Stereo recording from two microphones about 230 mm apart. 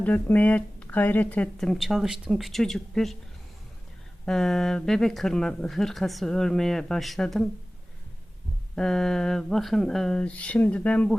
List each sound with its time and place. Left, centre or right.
0.0 s speech: centre
4.3 s speech: centre
8.7 s speech: centre